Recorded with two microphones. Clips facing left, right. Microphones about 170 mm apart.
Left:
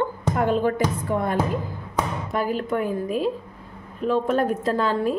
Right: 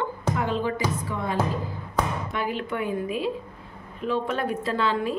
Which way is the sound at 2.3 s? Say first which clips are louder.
Left 4 dB; 40° left (ahead or behind).